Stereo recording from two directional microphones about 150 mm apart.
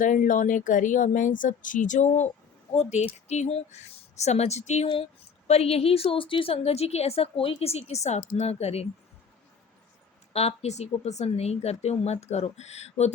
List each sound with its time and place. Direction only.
0.0 s a woman's voice: 60° left (ahead or behind); by 8.9 s 45° left (ahead or behind)
10.3 s a woman's voice: 45° left (ahead or behind)